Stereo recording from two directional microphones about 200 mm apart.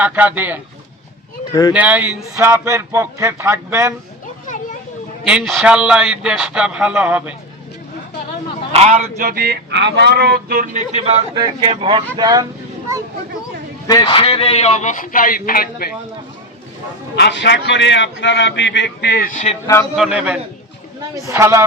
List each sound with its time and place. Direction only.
0.0 s speech: 10° right (ahead or behind)
1.7 s speech: 10° right (ahead or behind)
5.2 s a man's voice: 5° right (ahead or behind)
8.7 s speech: 30° right (ahead or behind)
13.8 s a man's voice: 20° left (ahead or behind); by 15.9 s 45° left (ahead or behind)
17.2 s a man's voice: 60° left (ahead or behind); by 19.5 s 40° left (ahead or behind)
19.6 s a man's voice: 15° left (ahead or behind)
20.0 s a man's voice: 5° right (ahead or behind)